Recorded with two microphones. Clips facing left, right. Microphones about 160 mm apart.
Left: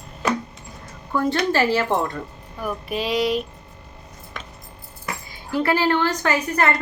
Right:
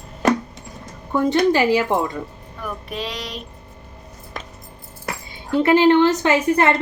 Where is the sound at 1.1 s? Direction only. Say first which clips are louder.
Right 4 dB; 20° right (ahead or behind).